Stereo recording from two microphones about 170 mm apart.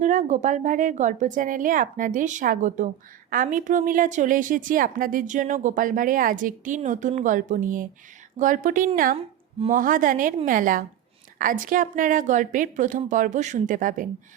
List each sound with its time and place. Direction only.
0.0 s speech: 45° right (ahead or behind)